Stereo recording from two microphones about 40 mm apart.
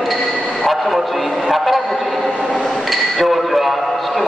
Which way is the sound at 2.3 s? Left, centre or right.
Centre.